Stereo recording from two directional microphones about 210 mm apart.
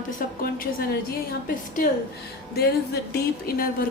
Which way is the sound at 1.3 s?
40° left (ahead or behind).